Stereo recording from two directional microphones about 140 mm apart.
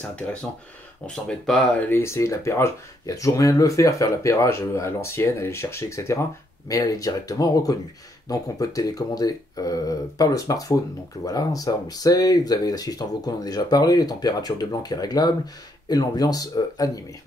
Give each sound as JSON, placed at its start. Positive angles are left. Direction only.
{"t": 0.1, "sound": "speech", "side_deg": 10}
{"t": 1.9, "sound": "speech", "side_deg": 20}